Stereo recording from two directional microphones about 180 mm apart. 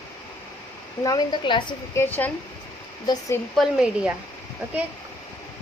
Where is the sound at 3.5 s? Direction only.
5° right (ahead or behind).